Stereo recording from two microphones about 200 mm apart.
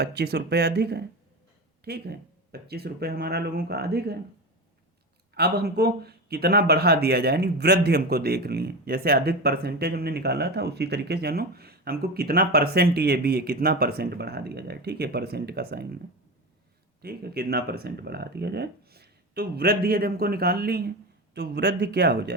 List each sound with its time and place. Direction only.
0.0 s speech: 55° right (ahead or behind)
5.3 s speech: 55° right (ahead or behind)
17.0 s speech: 50° right (ahead or behind)